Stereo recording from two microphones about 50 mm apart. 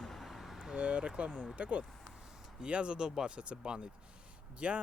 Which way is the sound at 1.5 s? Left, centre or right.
Right.